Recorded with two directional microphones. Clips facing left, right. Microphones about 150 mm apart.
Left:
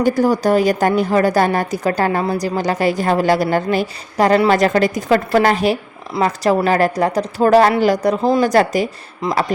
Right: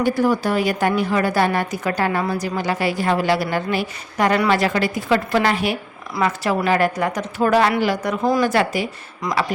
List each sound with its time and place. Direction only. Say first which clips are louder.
0.0 s a woman's voice: left 4 dB; 40° left (ahead or behind)
9.2 s speech: left 4 dB; 25° left (ahead or behind)